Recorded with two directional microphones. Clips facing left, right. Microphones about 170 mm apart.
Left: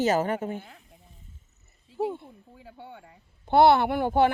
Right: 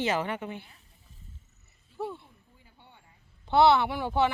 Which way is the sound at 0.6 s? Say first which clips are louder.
Left 9 dB; 90° left.